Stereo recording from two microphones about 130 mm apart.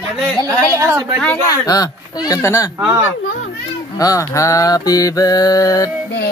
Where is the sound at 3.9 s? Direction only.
25° left (ahead or behind).